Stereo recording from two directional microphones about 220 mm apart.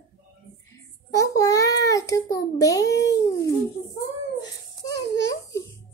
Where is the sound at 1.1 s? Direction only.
15° left (ahead or behind).